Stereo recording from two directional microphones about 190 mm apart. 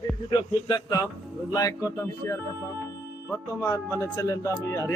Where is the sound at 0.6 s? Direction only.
20° left (ahead or behind).